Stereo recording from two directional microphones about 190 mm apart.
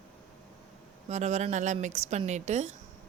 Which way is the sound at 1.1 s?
35° right (ahead or behind).